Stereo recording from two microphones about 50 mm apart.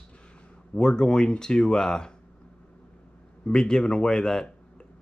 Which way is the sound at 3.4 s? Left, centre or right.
Centre.